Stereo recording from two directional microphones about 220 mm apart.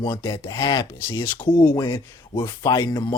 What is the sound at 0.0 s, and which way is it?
Speech, 15° left (ahead or behind).